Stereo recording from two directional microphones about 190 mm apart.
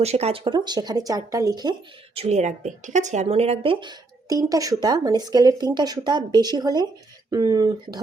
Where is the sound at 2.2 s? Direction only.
35° right (ahead or behind).